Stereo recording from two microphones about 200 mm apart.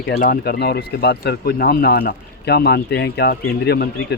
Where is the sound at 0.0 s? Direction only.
50° left (ahead or behind).